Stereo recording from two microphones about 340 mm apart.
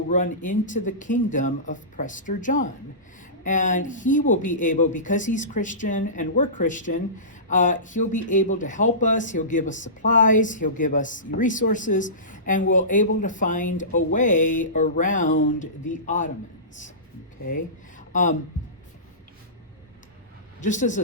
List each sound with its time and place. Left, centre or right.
0.1 s speech: left
17.5 s speech: left
20.6 s speech: left